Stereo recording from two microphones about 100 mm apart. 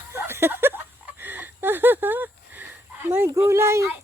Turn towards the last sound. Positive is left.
turn(degrees=-25)  # may be behind; listen again after turning